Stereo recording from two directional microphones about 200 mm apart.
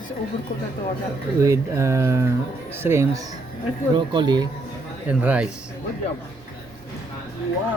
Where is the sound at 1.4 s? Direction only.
15° right (ahead or behind).